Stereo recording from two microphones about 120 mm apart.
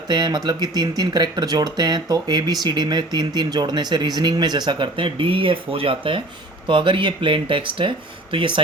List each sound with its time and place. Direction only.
0.1 s speech: 35° right (ahead or behind)